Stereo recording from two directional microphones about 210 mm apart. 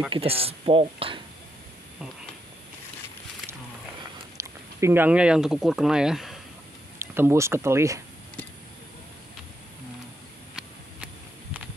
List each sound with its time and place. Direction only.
0.1 s speech: 25° right (ahead or behind)
4.4 s speech: 15° right (ahead or behind)
7.2 s speech: 10° right (ahead or behind)